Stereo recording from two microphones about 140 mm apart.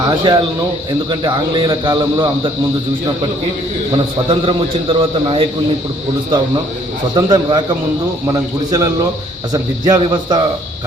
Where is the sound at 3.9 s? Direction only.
35° right (ahead or behind).